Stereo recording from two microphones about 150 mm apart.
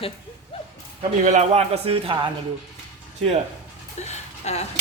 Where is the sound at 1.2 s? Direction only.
55° right (ahead or behind); by 2.3 s 35° right (ahead or behind).